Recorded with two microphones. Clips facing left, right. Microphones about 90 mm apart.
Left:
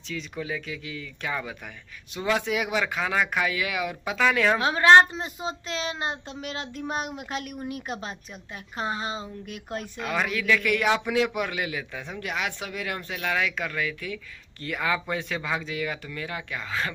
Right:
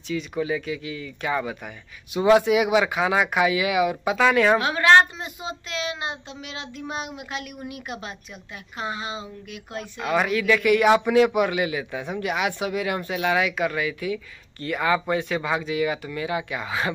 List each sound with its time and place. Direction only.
0.1 s a man's voice: 5° right (ahead or behind)
4.6 s a woman's voice: 30° left (ahead or behind)
9.9 s a man's voice: 5° right (ahead or behind)